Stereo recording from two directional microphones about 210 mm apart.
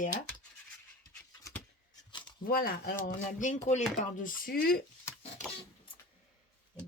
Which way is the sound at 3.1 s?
35° left (ahead or behind).